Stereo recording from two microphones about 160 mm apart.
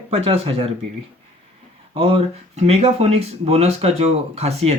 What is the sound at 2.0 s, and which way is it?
Speech, 35° right (ahead or behind).